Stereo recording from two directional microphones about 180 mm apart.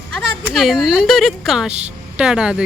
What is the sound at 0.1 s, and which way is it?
A woman's voice, centre (ahead or behind).